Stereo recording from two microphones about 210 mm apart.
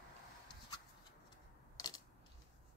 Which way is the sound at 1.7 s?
20° left (ahead or behind).